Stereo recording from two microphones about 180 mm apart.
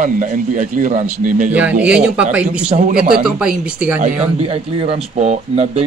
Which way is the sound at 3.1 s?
5° right (ahead or behind).